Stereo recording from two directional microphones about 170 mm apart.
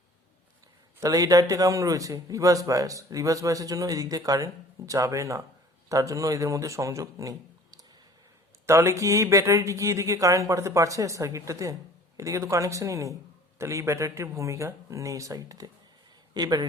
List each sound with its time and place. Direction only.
0.9 s a man's voice: 20° right (ahead or behind)